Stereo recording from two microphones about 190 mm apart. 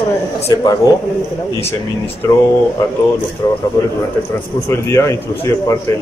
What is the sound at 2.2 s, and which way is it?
Speech, 15° left (ahead or behind).